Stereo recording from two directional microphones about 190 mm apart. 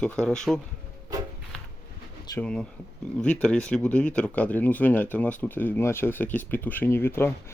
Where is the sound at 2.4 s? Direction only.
5° left (ahead or behind).